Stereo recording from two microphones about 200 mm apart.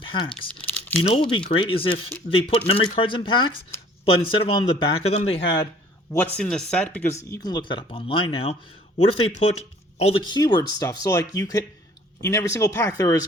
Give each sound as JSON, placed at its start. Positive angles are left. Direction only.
{"t": 0.0, "sound": "speech", "side_deg": 25}
{"t": 0.6, "sound": "crumpling", "side_deg": 10}
{"t": 1.1, "sound": "speech", "side_deg": 25}
{"t": 6.3, "sound": "speech", "side_deg": 5}